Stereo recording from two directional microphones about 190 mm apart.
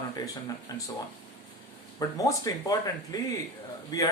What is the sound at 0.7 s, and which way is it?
Speech, 20° left (ahead or behind).